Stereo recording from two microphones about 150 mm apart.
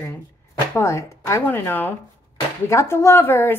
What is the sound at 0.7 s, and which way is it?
A woman's voice, 20° left (ahead or behind).